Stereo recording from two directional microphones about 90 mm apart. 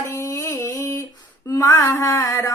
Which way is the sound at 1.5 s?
35° left (ahead or behind).